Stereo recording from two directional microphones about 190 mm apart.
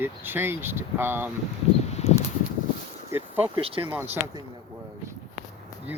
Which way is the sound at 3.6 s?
30° right (ahead or behind).